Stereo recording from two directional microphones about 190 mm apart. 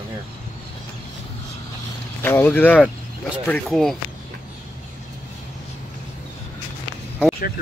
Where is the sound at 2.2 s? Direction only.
10° left (ahead or behind).